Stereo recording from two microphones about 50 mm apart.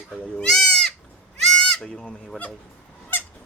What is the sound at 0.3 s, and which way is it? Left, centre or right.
Speech, centre.